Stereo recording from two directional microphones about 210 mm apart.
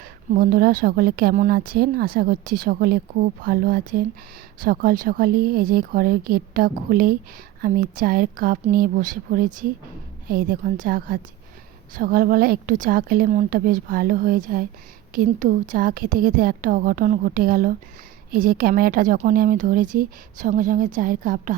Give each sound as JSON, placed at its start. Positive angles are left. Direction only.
{"t": 0.3, "sound": "a woman's voice", "side_deg": -45}